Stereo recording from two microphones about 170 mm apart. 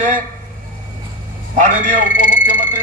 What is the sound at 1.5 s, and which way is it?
Speech, 50° right (ahead or behind).